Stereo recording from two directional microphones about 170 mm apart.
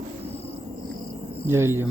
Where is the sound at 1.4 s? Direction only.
15° right (ahead or behind).